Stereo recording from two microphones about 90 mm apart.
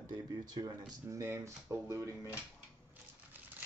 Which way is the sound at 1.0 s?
35° right (ahead or behind).